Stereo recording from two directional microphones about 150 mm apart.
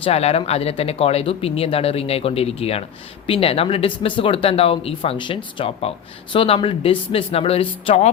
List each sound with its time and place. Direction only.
0.0 s speech: 45° left (ahead or behind)